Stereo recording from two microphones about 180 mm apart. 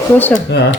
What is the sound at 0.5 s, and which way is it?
Speech, 70° left (ahead or behind).